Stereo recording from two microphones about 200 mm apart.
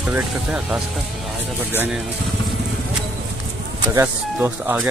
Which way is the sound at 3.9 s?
10° right (ahead or behind).